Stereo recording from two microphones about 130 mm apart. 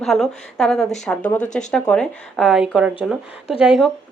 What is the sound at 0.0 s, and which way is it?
A woman's voice, centre (ahead or behind).